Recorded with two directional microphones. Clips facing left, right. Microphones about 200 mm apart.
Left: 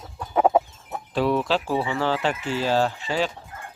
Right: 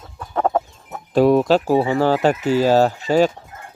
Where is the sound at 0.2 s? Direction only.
10° left (ahead or behind).